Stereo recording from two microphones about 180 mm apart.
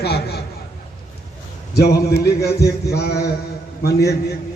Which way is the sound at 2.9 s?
60° left (ahead or behind).